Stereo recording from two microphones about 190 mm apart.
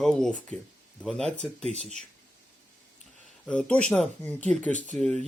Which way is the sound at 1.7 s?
35° right (ahead or behind).